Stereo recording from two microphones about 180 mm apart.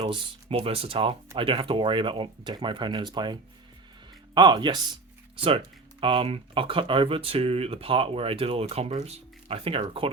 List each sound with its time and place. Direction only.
0.0 s speech: 35° right (ahead or behind)